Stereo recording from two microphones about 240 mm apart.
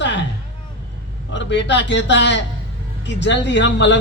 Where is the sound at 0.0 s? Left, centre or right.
Left.